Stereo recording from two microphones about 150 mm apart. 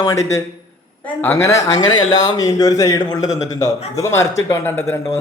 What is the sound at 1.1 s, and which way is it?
Speech, 15° left (ahead or behind).